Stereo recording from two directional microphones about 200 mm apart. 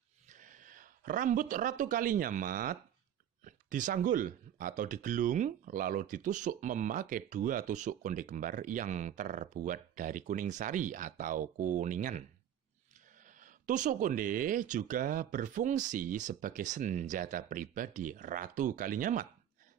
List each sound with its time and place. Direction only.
0.3 s speech: 40° right (ahead or behind)
13.2 s speech: 40° right (ahead or behind)